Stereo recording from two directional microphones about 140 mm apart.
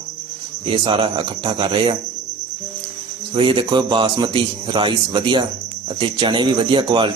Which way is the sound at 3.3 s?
40° right (ahead or behind).